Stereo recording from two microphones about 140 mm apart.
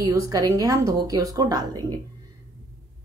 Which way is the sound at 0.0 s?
25° right (ahead or behind).